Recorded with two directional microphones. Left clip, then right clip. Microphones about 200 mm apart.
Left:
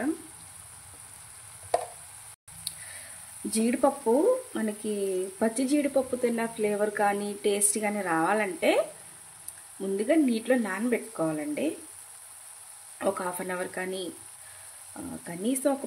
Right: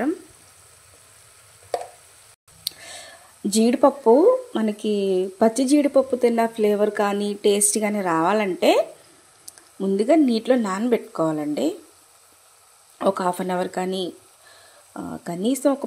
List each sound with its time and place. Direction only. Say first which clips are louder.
2.7 s a sound: right 9 dB; 35° right (ahead or behind)
3.5 s speech: right 8 dB; 35° right (ahead or behind)
13.0 s speech: right 8 dB; 30° right (ahead or behind)
15.2 s speech: right 7 dB; 30° right (ahead or behind)